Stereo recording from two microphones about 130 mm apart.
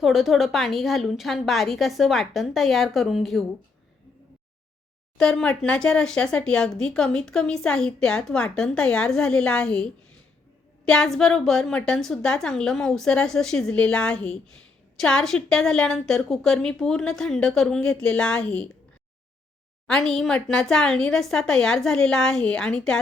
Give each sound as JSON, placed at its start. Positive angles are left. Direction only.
{"t": 0.0, "sound": "speech", "side_deg": 0}
{"t": 5.1, "sound": "speech", "side_deg": 5}
{"t": 19.9, "sound": "speech", "side_deg": 5}